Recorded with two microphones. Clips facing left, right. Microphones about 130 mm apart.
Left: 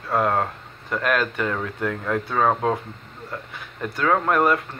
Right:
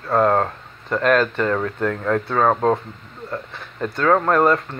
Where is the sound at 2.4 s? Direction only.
35° right (ahead or behind).